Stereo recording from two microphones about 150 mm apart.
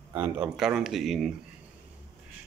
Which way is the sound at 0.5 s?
Centre (ahead or behind).